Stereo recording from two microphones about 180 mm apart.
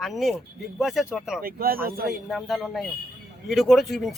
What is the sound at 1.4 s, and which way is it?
Speech, 55° right (ahead or behind).